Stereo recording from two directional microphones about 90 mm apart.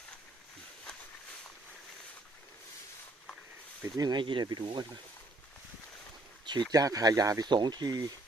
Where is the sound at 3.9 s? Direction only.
50° right (ahead or behind).